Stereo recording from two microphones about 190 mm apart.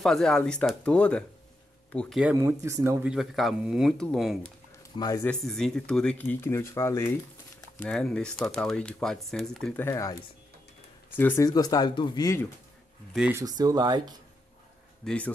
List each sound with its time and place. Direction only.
0.0 s speech: centre (ahead or behind)
2.3 s speech: 15° right (ahead or behind); by 4.4 s centre (ahead or behind)
4.9 s speech: 20° left (ahead or behind)
5.2 s speech: 5° left (ahead or behind)
9.8 s speech: 15° left (ahead or behind)
11.1 s speech: 10° left (ahead or behind)
13.1 s speech: 5° right (ahead or behind)
13.4 s speech: 20° right (ahead or behind)
15.0 s speech: 5° left (ahead or behind)